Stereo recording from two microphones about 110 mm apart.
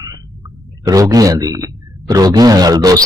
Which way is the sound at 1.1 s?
35° right (ahead or behind).